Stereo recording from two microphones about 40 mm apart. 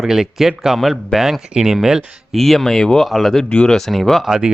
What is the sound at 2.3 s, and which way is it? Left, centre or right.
Speech, centre.